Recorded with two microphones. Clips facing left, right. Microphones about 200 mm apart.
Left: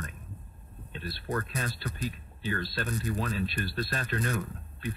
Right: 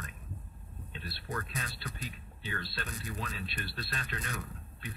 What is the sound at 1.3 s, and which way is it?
Speech, 50° left (ahead or behind).